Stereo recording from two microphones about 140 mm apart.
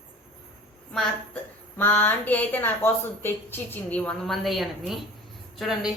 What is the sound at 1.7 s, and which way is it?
A woman's voice, 15° left (ahead or behind).